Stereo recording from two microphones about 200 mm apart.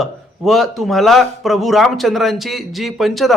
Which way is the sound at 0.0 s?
Centre (ahead or behind).